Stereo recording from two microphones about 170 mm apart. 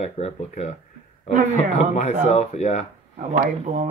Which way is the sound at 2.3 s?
40° left (ahead or behind).